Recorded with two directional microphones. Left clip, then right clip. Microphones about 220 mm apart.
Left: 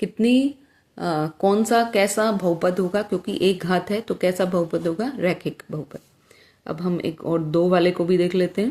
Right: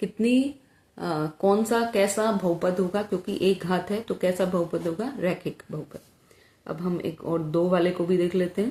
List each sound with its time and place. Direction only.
0.0 s speech: 40° left (ahead or behind)